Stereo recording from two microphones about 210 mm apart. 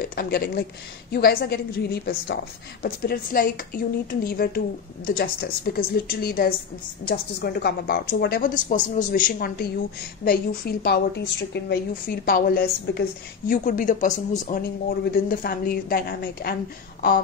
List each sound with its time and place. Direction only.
0.0 s a woman's voice: 45° left (ahead or behind)